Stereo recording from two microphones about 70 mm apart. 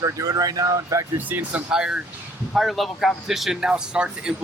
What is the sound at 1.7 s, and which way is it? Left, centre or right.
Speech, centre.